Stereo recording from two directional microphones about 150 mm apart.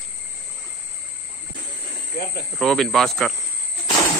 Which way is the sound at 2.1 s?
70° left (ahead or behind).